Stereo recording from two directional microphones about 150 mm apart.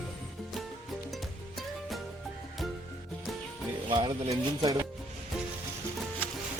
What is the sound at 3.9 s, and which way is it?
Speech, 30° right (ahead or behind).